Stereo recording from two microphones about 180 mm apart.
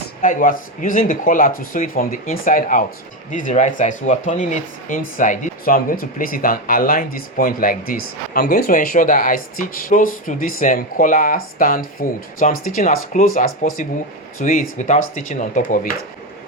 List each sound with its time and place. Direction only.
0.2 s speech: 50° left (ahead or behind)